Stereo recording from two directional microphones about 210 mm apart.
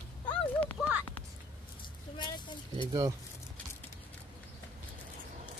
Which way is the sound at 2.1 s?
20° left (ahead or behind).